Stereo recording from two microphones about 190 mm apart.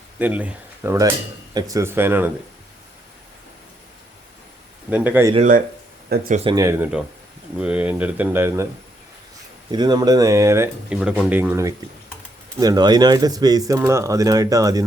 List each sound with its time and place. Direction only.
0.2 s speech: 10° right (ahead or behind)
4.9 s speech: 10° right (ahead or behind)
6.1 s speech: 45° right (ahead or behind)
6.4 s speech: 20° right (ahead or behind)
9.7 s speech: 20° right (ahead or behind)